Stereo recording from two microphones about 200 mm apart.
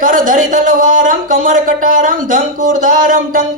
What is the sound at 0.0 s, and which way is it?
Speech, 40° right (ahead or behind).